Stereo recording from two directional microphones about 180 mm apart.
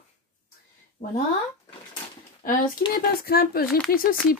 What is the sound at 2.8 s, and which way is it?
Speech, 60° left (ahead or behind).